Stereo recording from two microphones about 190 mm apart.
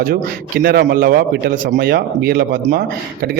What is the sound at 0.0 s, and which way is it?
A man's voice, 50° right (ahead or behind).